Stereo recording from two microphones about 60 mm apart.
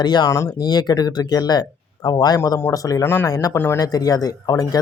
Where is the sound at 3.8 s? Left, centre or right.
Left.